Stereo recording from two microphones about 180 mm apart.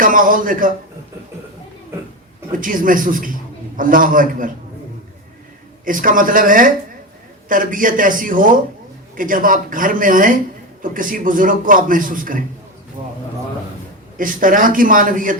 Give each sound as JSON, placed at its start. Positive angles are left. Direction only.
{"t": 0.0, "sound": "a man's voice", "side_deg": -50}
{"t": 2.5, "sound": "a man's voice", "side_deg": -50}
{"t": 5.8, "sound": "a man's voice", "side_deg": -50}
{"t": 14.2, "sound": "a man's voice", "side_deg": -50}